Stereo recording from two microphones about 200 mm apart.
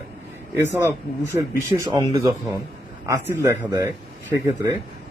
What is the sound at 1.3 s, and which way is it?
A man's voice, 15° right (ahead or behind).